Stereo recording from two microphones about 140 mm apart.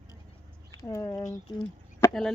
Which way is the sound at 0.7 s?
25° left (ahead or behind).